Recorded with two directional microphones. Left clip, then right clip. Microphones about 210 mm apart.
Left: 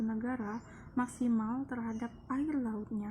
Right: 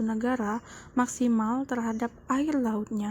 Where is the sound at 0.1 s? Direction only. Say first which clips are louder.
Right 10 dB; 35° right (ahead or behind).